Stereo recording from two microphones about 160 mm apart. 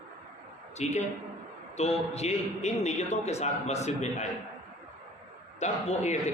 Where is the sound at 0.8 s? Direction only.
45° left (ahead or behind).